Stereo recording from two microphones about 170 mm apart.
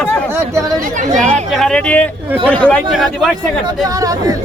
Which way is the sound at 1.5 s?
Centre (ahead or behind).